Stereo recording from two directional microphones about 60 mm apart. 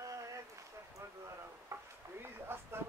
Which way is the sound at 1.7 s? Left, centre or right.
Right.